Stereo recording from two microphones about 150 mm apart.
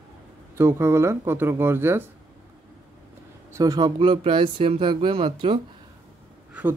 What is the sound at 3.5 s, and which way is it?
Speech, 25° right (ahead or behind).